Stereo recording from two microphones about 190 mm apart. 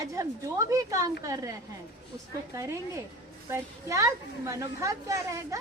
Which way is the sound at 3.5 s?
15° right (ahead or behind).